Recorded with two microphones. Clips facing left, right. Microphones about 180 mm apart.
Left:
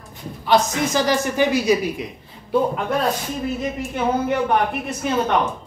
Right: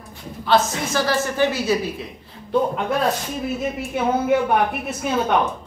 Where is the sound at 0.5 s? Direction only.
15° left (ahead or behind).